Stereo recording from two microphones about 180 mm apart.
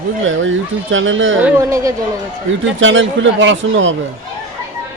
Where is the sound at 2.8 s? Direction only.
90° right.